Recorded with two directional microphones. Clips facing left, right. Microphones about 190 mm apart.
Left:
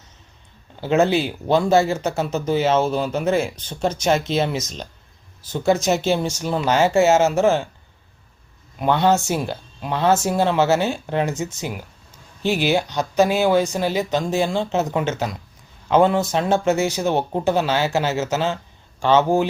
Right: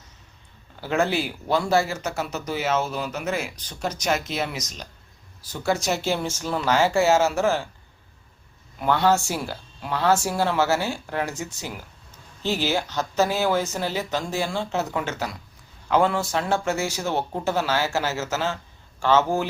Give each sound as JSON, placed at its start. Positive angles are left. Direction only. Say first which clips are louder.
{"t": 0.8, "sound": "speech", "louder": "left 6 dB", "side_deg": 20}
{"t": 8.8, "sound": "speech", "louder": "left 3 dB", "side_deg": 20}